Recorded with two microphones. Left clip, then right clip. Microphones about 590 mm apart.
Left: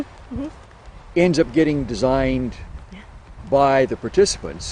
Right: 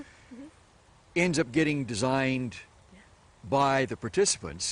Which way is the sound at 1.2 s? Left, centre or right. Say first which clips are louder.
Left 9 dB; right.